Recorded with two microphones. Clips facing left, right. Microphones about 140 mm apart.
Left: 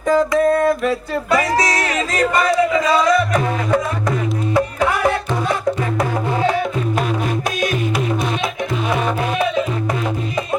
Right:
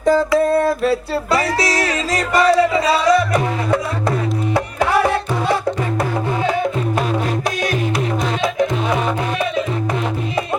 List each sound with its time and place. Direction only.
0.0 s a sound: 35° right (ahead or behind)
2.4 s music: 30° right (ahead or behind)
4.9 s music: 30° right (ahead or behind)